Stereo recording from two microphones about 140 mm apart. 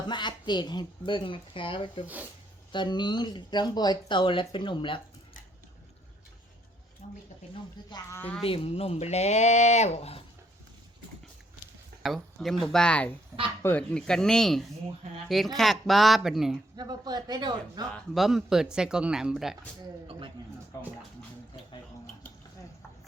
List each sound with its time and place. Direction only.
0.1 s speech: 35° left (ahead or behind)
7.0 s speech: 60° left (ahead or behind)
7.5 s speech: 30° left (ahead or behind)
8.1 s a woman's voice: 15° left (ahead or behind)
8.4 s speech: 40° left (ahead or behind)
12.0 s speech: centre (ahead or behind)
16.7 s speech: 30° right (ahead or behind)
17.9 s speech: centre (ahead or behind)
20.1 s a man's voice: 35° right (ahead or behind)